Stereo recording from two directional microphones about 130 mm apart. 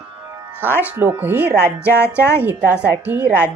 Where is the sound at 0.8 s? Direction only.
15° right (ahead or behind).